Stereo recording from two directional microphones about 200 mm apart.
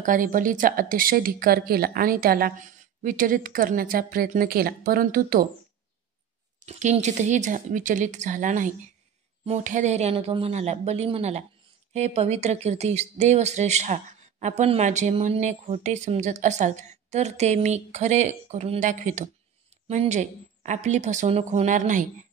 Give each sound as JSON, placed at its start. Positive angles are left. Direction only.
{"t": 0.0, "sound": "a woman's voice", "side_deg": -40}
{"t": 6.6, "sound": "speech", "side_deg": -35}